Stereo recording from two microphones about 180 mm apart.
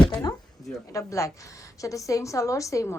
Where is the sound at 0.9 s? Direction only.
15° left (ahead or behind).